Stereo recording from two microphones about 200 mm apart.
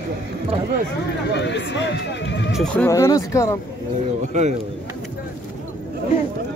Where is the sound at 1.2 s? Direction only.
60° left (ahead or behind).